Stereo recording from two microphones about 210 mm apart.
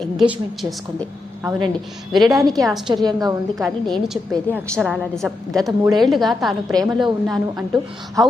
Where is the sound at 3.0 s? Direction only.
20° right (ahead or behind).